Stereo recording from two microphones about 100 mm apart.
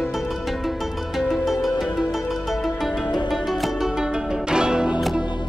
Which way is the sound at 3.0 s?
50° left (ahead or behind).